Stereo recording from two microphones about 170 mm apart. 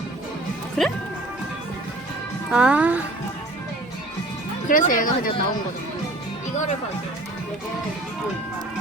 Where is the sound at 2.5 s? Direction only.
5° right (ahead or behind).